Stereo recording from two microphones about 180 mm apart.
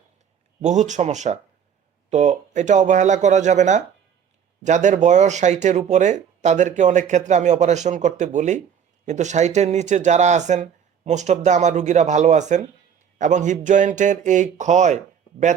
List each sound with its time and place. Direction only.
0.6 s speech: 40° right (ahead or behind)